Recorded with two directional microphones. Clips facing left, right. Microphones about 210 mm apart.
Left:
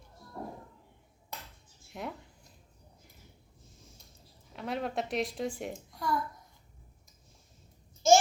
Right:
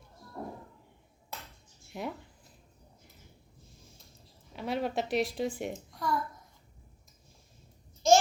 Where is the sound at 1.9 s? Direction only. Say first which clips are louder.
Right 2 dB; centre (ahead or behind).